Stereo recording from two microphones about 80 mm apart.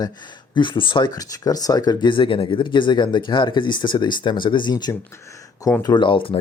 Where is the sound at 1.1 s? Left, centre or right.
Left.